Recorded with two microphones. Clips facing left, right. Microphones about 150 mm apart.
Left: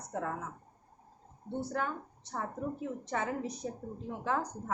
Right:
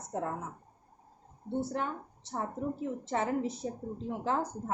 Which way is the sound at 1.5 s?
25° right (ahead or behind).